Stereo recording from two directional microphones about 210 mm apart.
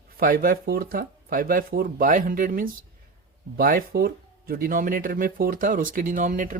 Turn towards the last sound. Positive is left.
turn(degrees=-40)  # may be behind; listen again after turning